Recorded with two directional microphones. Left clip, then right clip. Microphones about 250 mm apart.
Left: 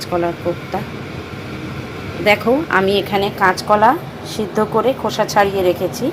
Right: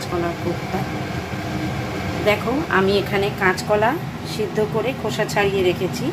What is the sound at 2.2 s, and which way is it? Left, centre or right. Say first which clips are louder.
A woman's voice: left 6 dB; left.